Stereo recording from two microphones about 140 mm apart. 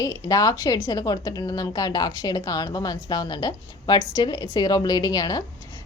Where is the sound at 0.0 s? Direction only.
25° left (ahead or behind).